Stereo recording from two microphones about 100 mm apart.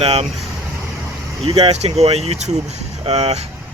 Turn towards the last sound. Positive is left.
turn(degrees=-90)